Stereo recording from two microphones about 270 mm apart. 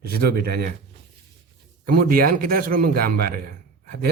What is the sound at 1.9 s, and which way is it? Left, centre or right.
A man's voice, right.